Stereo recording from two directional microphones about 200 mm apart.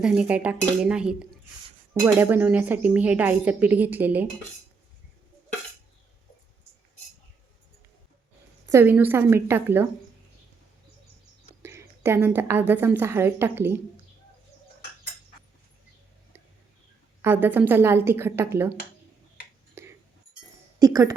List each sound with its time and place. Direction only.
0.0 s dishes: 5° right (ahead or behind)
1.9 s a woman's voice: 10° right (ahead or behind)
8.7 s a woman's voice: 10° right (ahead or behind)
11.6 s a woman's voice: 15° right (ahead or behind)
17.2 s a woman's voice: 10° right (ahead or behind)
19.8 s a sound: 10° right (ahead or behind)
20.7 s a woman's voice: 15° right (ahead or behind)